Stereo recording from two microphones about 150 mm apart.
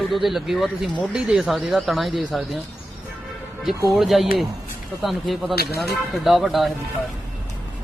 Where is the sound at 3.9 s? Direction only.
Centre (ahead or behind).